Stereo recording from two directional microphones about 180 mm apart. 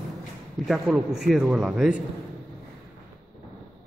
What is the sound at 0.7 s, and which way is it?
A man's voice, 5° right (ahead or behind).